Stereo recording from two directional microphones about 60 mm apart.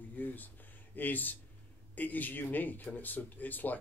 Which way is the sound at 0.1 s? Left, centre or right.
Left.